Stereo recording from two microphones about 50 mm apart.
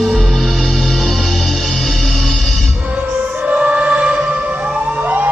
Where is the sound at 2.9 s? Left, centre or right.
Right.